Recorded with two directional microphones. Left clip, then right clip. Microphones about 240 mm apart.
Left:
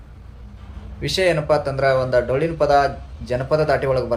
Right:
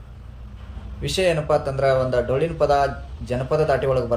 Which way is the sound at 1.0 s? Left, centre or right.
Centre.